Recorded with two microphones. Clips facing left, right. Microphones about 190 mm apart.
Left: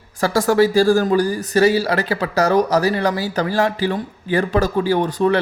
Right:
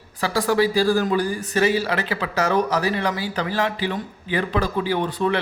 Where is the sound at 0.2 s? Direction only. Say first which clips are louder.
Left 5 dB; 45° left (ahead or behind).